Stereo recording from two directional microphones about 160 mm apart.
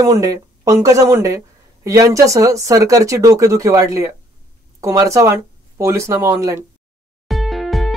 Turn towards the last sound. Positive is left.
turn(degrees=0)  # may be behind; listen again after turning